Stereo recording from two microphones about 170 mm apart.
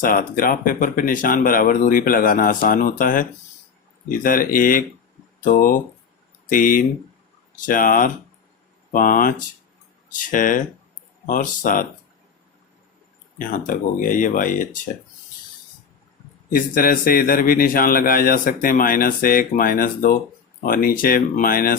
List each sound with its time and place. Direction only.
0.0 s a man's voice: 55° left (ahead or behind)
13.4 s speech: 50° left (ahead or behind)
16.5 s a man's voice: 55° left (ahead or behind)